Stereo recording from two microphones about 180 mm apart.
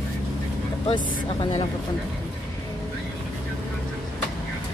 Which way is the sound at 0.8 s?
30° left (ahead or behind).